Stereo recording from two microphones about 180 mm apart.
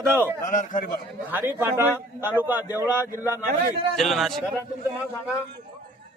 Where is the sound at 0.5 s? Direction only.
45° left (ahead or behind).